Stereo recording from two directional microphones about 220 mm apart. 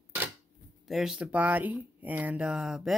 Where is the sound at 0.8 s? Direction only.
Centre (ahead or behind).